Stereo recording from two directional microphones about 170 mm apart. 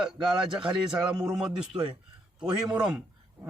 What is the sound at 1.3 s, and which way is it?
A man's voice, 5° right (ahead or behind).